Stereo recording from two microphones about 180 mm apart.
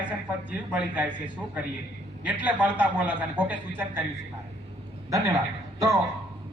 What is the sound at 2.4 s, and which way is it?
A man's voice, 10° right (ahead or behind).